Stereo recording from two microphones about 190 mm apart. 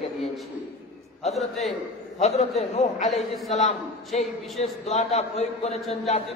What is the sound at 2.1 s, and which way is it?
A man's voice, 35° left (ahead or behind).